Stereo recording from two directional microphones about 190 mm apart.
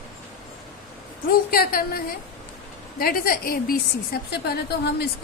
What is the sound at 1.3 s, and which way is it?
A woman's voice, 50° left (ahead or behind).